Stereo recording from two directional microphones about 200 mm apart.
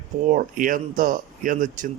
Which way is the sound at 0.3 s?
40° right (ahead or behind).